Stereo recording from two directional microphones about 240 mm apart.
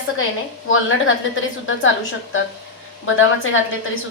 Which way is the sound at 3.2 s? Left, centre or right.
Left.